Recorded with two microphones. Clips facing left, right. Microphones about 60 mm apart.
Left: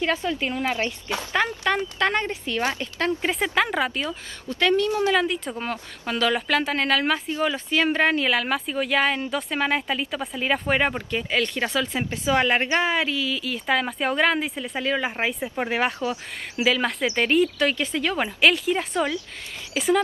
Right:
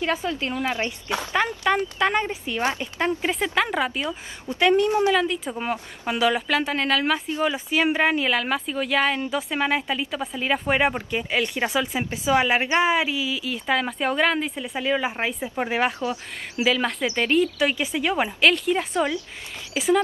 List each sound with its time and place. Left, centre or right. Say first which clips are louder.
0.0 s speech: left 1 dB; centre
0.4 s a woman's voice: even; centre
0.7 s speech: even; right
2.0 s speech: right 1 dB; centre
3.2 s speech: even; centre
4.0 s speech: right 1 dB; right
5.1 s speech: even; centre
7.4 s speech: even; centre
18.4 s speech: left 1 dB; centre
18.9 s speech: right 1 dB; right
19.7 s speech: even; centre